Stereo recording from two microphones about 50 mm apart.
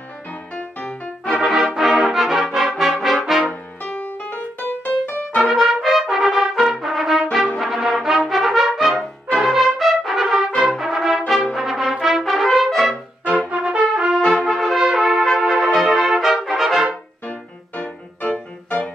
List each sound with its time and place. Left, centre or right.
0.3 s music: left
1.4 s brass instrument: centre
3.8 s music: left
5.4 s brass instrument: centre
10.9 s brass instrument: centre
13.2 s brass instrument: left
13.5 s brass instrument: right
14.2 s brass instrument: centre
18.2 s music: left